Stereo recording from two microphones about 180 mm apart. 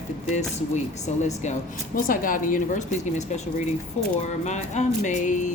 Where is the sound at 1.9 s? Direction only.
50° left (ahead or behind).